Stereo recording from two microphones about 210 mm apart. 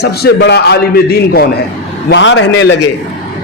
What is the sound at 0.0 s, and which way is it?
A man's voice, 50° left (ahead or behind).